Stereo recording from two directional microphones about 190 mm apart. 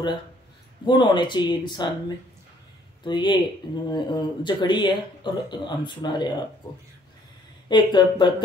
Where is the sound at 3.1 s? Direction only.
25° left (ahead or behind).